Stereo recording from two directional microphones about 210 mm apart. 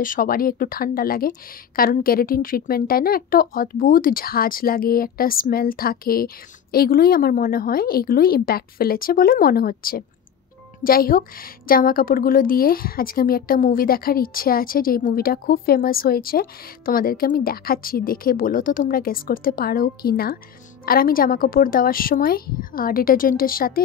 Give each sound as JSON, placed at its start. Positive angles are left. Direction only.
{"t": 0.0, "sound": "a woman's voice", "side_deg": 40}